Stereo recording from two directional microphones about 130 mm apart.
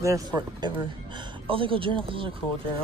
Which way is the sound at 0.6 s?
35° right (ahead or behind).